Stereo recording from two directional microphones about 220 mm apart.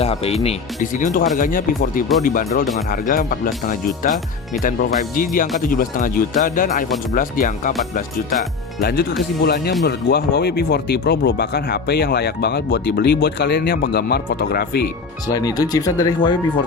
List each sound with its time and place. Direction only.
0.0 s speech: 25° left (ahead or behind); by 14.8 s 45° left (ahead or behind)
15.3 s speech: 15° left (ahead or behind)